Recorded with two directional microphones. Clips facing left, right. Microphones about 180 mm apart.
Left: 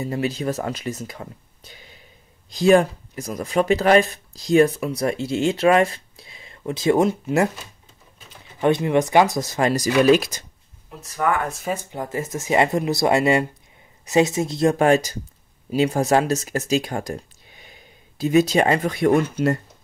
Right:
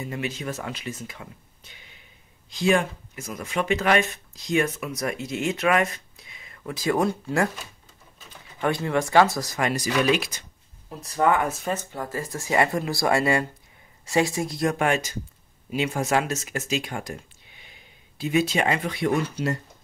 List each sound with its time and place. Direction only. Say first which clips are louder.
0.0 s speech: left 7 dB; 35° left (ahead or behind)
8.5 s speech: left 6 dB; 20° left (ahead or behind); by 10.4 s 40° left (ahead or behind)
11.0 s speech: right 1 dB; 25° right (ahead or behind)
11.4 s speech: even; centre (ahead or behind)
11.7 s speech: left 3 dB; 15° left (ahead or behind); by 19.6 s 50° left (ahead or behind)